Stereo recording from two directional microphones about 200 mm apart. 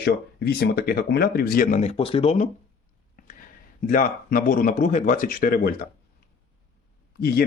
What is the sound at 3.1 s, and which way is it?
A man's voice, 40° left (ahead or behind).